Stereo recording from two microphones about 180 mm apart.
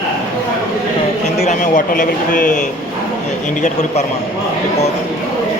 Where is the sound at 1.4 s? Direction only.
40° left (ahead or behind).